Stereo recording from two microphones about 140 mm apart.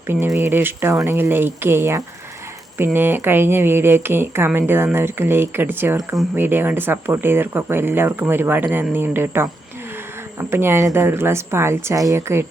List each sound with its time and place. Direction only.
0.3 s speech: 15° right (ahead or behind)
10.5 s speech: 15° right (ahead or behind)